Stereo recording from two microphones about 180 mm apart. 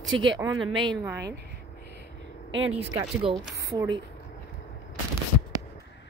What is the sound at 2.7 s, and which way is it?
Speech, 30° right (ahead or behind).